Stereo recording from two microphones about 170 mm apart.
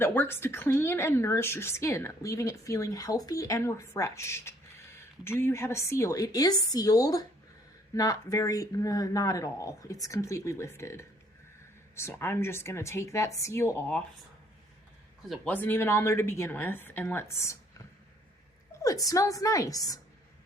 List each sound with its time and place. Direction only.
0.0 s a woman's voice: 10° left (ahead or behind)
15.3 s a woman's voice: 10° left (ahead or behind)